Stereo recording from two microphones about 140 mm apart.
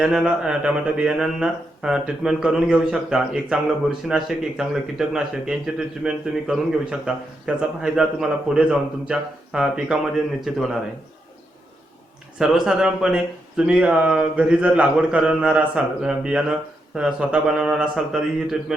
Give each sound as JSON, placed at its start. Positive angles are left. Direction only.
{"t": 0.0, "sound": "speech", "side_deg": -5}
{"t": 12.4, "sound": "speech", "side_deg": -5}